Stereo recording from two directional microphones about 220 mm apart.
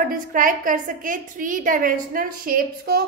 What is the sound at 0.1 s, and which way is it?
A woman's voice, 40° right (ahead or behind).